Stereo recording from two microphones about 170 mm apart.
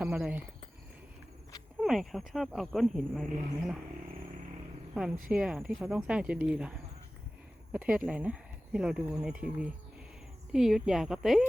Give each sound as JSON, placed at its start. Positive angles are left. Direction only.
{"t": 0.0, "sound": "cricket", "side_deg": -5}
{"t": 1.8, "sound": "speech", "side_deg": 0}
{"t": 5.1, "sound": "speech", "side_deg": -55}
{"t": 5.4, "sound": "speech", "side_deg": -5}